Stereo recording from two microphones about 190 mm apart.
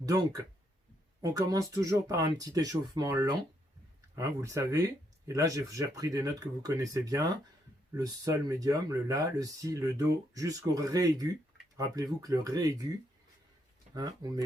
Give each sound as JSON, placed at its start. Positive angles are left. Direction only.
{"t": 0.0, "sound": "speech", "side_deg": -20}
{"t": 13.9, "sound": "speech", "side_deg": -20}